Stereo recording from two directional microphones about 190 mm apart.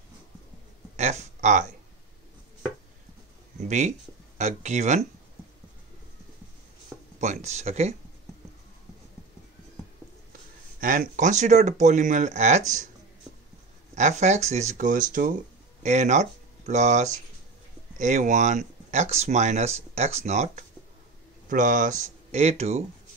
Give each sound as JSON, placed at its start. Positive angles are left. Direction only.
{"t": 0.9, "sound": "speech", "side_deg": -35}
{"t": 3.6, "sound": "speech", "side_deg": -35}
{"t": 7.2, "sound": "speech", "side_deg": -35}
{"t": 10.8, "sound": "speech", "side_deg": -45}
{"t": 13.9, "sound": "speech", "side_deg": -35}